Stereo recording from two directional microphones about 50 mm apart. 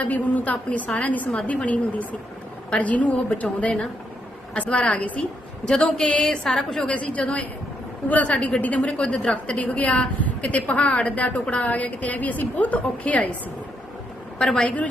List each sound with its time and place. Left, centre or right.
0.0 s a woman's voice: left; by 6.9 s centre
6.9 s a woman's voice: left
8.8 s a woman's voice: centre
14.3 s a woman's voice: centre